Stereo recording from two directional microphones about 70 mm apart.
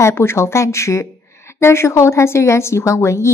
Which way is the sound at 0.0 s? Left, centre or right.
Left.